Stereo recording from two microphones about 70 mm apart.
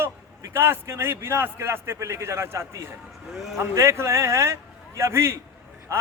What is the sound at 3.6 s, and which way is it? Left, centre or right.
A man's voice, right.